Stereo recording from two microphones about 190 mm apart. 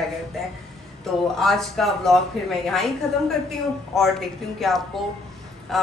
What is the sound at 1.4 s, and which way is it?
A woman's voice, centre (ahead or behind).